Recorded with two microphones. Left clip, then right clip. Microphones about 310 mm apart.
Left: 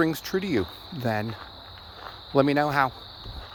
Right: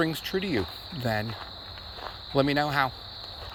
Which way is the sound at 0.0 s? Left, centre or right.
Centre.